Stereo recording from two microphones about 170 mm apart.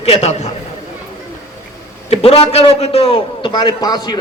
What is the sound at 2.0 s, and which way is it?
A man's voice, 35° left (ahead or behind).